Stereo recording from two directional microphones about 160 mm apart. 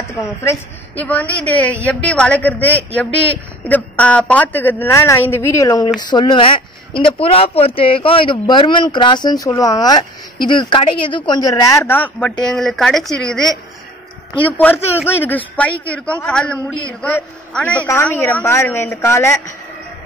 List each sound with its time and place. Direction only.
0.4 s a woman's voice: 15° left (ahead or behind)
15.0 s a woman's voice: 10° left (ahead or behind)